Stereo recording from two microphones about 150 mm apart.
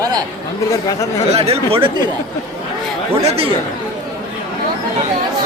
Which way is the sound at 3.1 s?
40° right (ahead or behind).